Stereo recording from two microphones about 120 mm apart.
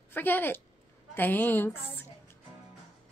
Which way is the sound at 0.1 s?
15° left (ahead or behind).